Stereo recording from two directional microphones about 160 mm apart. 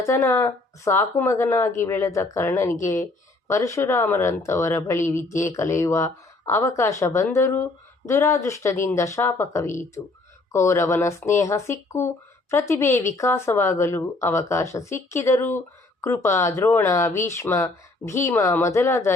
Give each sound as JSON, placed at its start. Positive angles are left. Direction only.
{"t": 0.0, "sound": "speech", "side_deg": 20}